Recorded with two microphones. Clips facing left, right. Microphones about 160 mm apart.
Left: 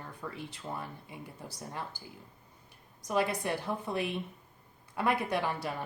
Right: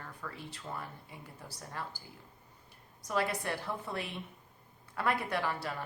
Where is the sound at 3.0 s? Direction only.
15° left (ahead or behind).